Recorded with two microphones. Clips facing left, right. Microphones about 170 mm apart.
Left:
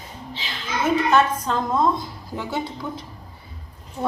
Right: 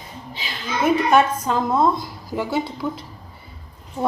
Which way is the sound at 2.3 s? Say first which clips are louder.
Right 6 dB; 80° right.